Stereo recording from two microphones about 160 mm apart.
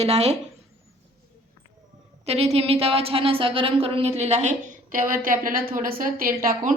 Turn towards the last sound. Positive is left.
turn(degrees=-65)  # may be behind; listen again after turning